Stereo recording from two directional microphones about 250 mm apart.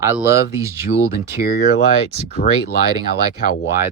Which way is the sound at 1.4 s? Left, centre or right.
Left.